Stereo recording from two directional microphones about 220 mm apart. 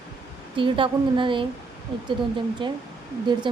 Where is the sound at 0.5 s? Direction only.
20° right (ahead or behind).